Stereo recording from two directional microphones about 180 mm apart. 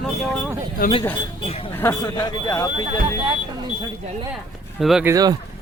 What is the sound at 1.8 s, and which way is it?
Speech, 15° left (ahead or behind).